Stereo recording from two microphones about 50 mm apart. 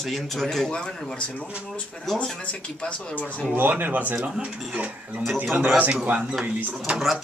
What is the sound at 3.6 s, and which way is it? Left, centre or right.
Speech, right.